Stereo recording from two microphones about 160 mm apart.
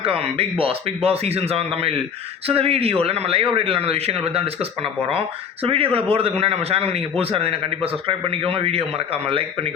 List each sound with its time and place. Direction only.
0.0 s a man's voice: 40° right (ahead or behind)